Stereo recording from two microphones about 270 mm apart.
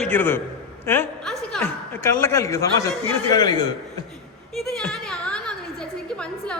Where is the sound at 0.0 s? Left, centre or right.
Centre.